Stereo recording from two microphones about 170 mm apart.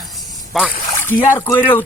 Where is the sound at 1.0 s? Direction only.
10° left (ahead or behind).